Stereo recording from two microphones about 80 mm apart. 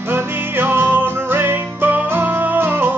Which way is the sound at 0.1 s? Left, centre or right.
Right.